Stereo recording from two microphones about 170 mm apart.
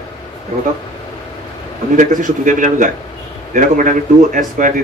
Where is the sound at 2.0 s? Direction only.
50° right (ahead or behind).